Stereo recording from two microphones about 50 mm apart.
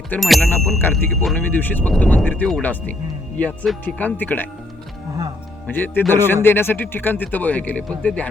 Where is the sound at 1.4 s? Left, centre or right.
Left.